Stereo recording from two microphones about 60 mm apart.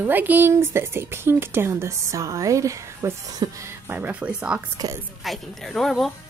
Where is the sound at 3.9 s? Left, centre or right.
Right.